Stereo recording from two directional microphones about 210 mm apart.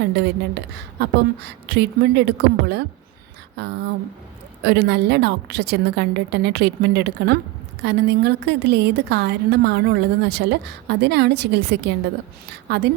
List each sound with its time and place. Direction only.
0.0 s a woman's voice: 55° right (ahead or behind)